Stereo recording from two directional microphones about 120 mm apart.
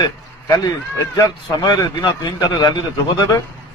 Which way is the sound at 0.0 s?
35° left (ahead or behind).